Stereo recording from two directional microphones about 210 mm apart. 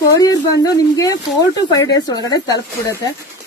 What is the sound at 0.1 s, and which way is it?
Speech, 15° left (ahead or behind).